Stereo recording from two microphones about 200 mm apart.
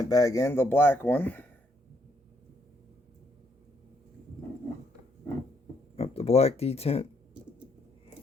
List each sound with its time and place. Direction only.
0.0 s speech: 15° left (ahead or behind)
6.0 s speech: 30° left (ahead or behind)